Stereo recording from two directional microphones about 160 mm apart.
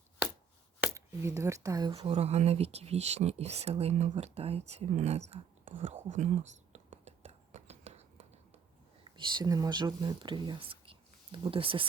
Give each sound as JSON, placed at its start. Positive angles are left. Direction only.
{"t": 0.8, "sound": "speech", "side_deg": -15}
{"t": 2.0, "sound": "speech", "side_deg": -40}
{"t": 6.7, "sound": "whispering", "side_deg": -45}
{"t": 9.0, "sound": "speech", "side_deg": -30}